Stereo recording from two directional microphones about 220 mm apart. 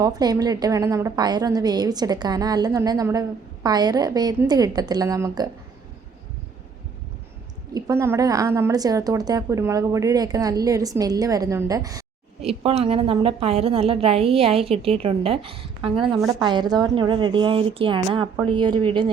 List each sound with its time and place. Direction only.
0.0 s a woman's voice: 15° right (ahead or behind)
7.7 s a woman's voice: 15° right (ahead or behind)
12.4 s a woman's voice: 25° right (ahead or behind)